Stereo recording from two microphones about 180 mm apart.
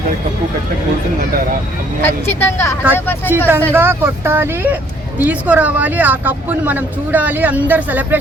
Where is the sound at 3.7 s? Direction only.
10° right (ahead or behind).